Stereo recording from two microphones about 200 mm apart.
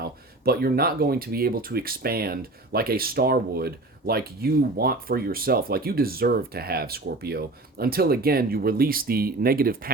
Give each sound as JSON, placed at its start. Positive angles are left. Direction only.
{"t": 0.0, "sound": "speech", "side_deg": -50}